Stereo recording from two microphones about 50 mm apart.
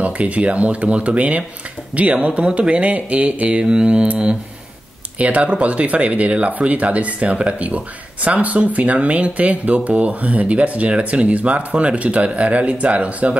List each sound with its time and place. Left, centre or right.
0.0 s speech: right